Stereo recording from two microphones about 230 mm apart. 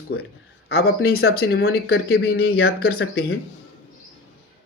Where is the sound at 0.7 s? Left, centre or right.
Left.